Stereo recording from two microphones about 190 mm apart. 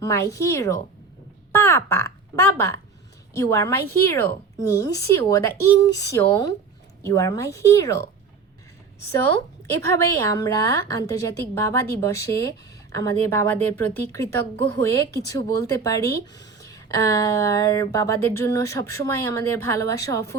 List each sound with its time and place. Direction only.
0.0 s a woman's voice: 15° left (ahead or behind)
10.2 s a woman's voice: 15° left (ahead or behind)